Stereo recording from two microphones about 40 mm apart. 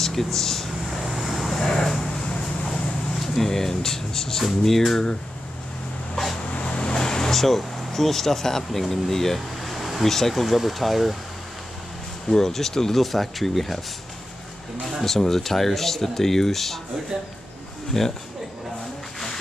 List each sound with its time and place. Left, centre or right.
0.0 s speech: centre
1.1 s vehicle: centre
3.2 s speech: centre
6.5 s vehicle: left; by 10.1 s centre
10.1 s speech: centre
12.3 s speech: centre
15.0 s speech: centre
17.1 s speech: centre
17.9 s speech: centre